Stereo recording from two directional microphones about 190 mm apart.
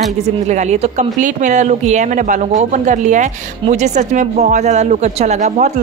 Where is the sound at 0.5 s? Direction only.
35° right (ahead or behind).